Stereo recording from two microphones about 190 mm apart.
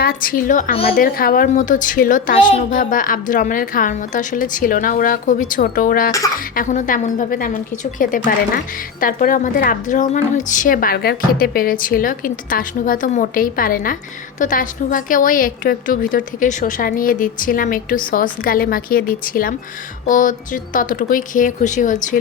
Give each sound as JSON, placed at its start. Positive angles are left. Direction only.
{"t": 0.0, "sound": "a woman's voice", "side_deg": 50}
{"t": 2.3, "sound": "a child's voice", "side_deg": 30}
{"t": 2.6, "sound": "a woman's voice", "side_deg": 45}